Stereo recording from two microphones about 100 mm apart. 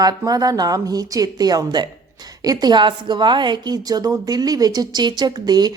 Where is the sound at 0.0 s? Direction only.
40° right (ahead or behind).